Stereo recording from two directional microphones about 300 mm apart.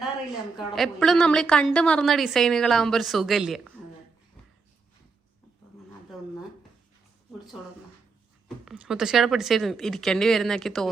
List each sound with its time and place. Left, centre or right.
0.5 s a woman's voice: centre
8.4 s a woman's voice: centre